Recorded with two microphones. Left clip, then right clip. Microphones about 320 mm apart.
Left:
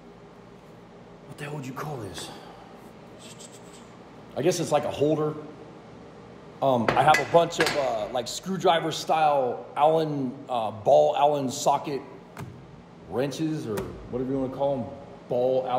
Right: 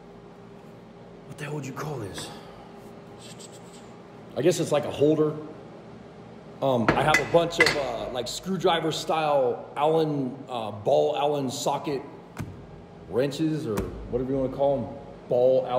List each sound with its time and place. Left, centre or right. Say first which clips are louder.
1.4 s speech: right 1 dB; centre
4.4 s speech: right 1 dB; centre
6.6 s speech: left 2 dB; centre
13.1 s speech: right 2 dB; centre